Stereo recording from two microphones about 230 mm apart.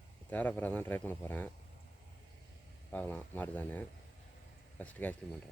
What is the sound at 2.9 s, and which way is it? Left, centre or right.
Speech, centre.